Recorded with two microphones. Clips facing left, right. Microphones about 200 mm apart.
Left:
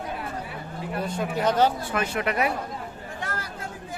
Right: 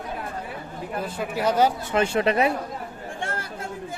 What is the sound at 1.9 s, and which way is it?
Speech, 30° right (ahead or behind).